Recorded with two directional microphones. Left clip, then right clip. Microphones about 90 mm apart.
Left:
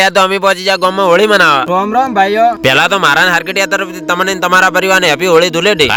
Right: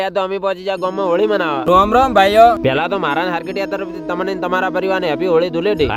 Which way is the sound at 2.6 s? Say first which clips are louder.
Left 8 dB; 15° left (ahead or behind).